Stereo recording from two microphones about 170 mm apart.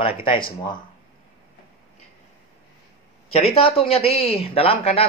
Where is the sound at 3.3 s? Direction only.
35° left (ahead or behind).